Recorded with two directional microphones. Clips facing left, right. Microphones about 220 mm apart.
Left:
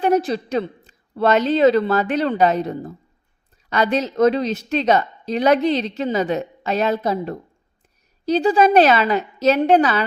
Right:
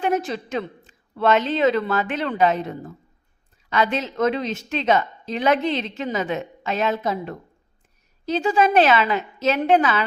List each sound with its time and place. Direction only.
0.0 s a woman's voice: 35° left (ahead or behind)